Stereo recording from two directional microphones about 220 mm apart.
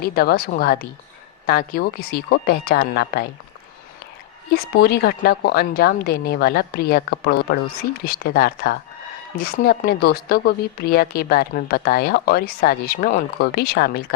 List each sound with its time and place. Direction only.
0.0 s speech: 45° left (ahead or behind)
4.5 s speech: 45° left (ahead or behind)